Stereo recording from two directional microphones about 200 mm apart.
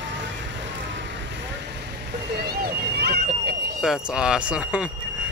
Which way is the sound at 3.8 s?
5° right (ahead or behind).